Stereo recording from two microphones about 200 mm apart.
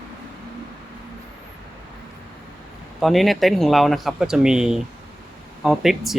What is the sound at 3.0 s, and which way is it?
Speech, centre (ahead or behind).